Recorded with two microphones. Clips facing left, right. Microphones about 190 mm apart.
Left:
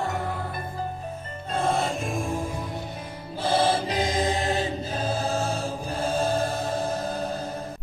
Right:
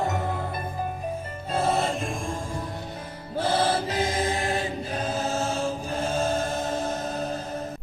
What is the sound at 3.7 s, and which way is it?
Music, 15° left (ahead or behind).